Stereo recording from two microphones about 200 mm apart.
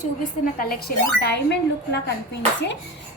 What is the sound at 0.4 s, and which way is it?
Speech, 50° left (ahead or behind).